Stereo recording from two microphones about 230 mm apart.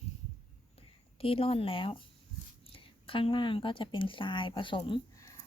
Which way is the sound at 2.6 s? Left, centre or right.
Left.